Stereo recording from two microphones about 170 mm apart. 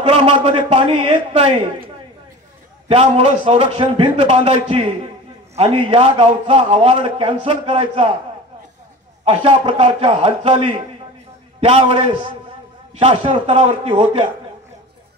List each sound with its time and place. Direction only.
0.0 s a man's voice: 35° right (ahead or behind)
2.9 s a man's voice: 35° right (ahead or behind)
9.2 s a man's voice: 35° right (ahead or behind)